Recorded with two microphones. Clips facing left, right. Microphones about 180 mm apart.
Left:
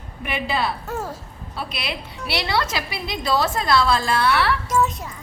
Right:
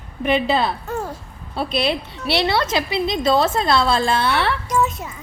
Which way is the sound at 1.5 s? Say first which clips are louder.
Right 9 dB; 30° right (ahead or behind).